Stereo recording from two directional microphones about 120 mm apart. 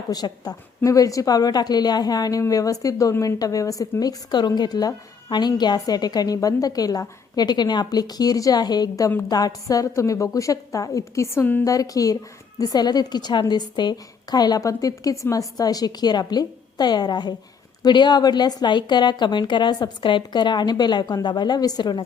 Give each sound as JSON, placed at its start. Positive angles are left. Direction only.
{"t": 0.1, "sound": "a woman's voice", "side_deg": 35}
{"t": 11.6, "sound": "a woman's voice", "side_deg": 30}